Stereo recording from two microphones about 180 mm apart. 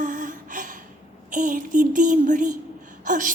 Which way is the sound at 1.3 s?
45° right (ahead or behind).